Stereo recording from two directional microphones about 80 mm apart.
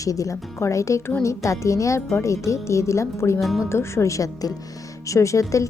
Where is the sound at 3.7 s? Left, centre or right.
Left.